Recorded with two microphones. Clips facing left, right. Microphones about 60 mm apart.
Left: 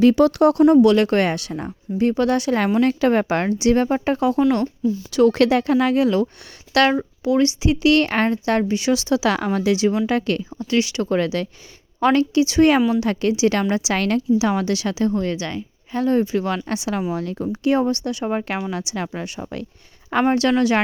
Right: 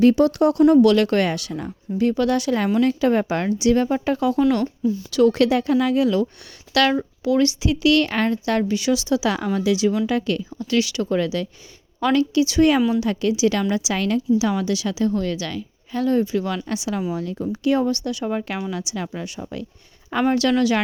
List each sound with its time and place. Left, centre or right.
0.2 s speech: left
0.8 s a woman's voice: left
2.8 s a woman's voice: left
4.8 s speech: centre
5.2 s speech: left
6.9 s a woman's voice: left
9.0 s speech: left
10.6 s speech: left
11.0 s a woman's voice: left
13.9 s a woman's voice: left
14.3 s speech: left
15.1 s a woman's voice: left
17.5 s a woman's voice: left
20.2 s a woman's voice: left